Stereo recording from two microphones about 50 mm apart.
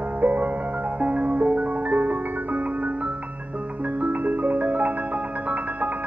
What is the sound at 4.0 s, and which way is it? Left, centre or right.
Music, right.